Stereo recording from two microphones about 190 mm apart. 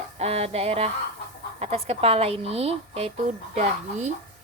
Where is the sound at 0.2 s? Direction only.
35° right (ahead or behind).